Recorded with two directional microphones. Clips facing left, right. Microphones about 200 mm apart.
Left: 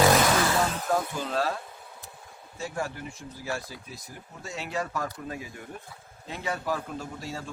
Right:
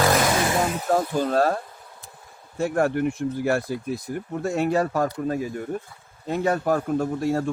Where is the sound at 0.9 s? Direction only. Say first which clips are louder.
Right 9 dB; 50° right (ahead or behind).